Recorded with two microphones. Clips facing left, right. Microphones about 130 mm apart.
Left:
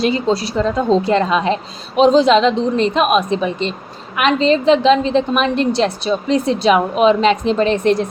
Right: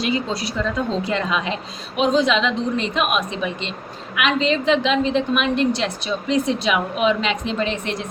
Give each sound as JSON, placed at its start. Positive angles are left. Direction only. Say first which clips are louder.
{"t": 0.0, "sound": "a woman's voice", "louder": "left 6 dB", "side_deg": 35}